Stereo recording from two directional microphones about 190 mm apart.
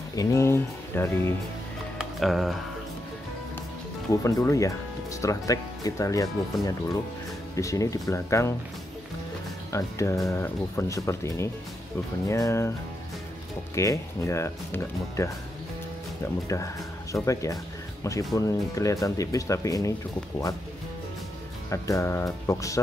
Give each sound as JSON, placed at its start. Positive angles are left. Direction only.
{"t": 0.1, "sound": "speech", "side_deg": 15}
{"t": 2.0, "sound": "music", "side_deg": 0}
{"t": 4.1, "sound": "speech", "side_deg": 15}
{"t": 9.7, "sound": "speech", "side_deg": 15}
{"t": 13.7, "sound": "speech", "side_deg": 15}
{"t": 16.4, "sound": "speech", "side_deg": 15}
{"t": 21.6, "sound": "speech", "side_deg": 15}